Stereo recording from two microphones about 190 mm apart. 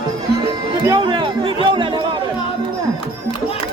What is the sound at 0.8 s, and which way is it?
Chatter, 20° right (ahead or behind).